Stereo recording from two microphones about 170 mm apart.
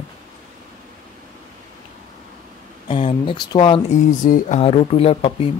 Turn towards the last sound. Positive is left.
turn(degrees=35)  # may be behind; listen again after turning